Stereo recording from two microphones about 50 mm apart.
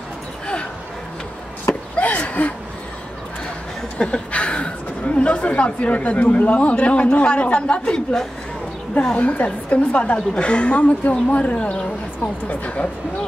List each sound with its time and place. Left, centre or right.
2.0 s a sound: left
4.0 s speech: left
9.1 s speech: left